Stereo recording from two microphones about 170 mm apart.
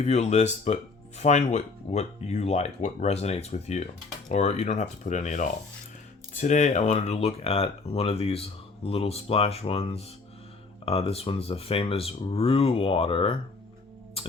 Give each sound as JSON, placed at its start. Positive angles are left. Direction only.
{"t": 0.0, "sound": "speech", "side_deg": 40}